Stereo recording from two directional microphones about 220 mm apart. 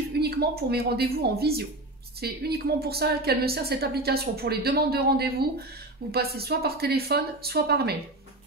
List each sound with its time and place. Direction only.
0.2 s a woman's voice: 45° right (ahead or behind)